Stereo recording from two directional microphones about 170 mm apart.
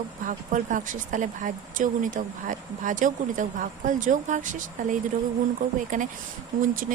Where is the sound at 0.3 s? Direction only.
50° right (ahead or behind).